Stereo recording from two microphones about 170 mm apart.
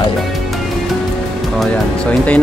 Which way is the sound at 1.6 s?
10° left (ahead or behind).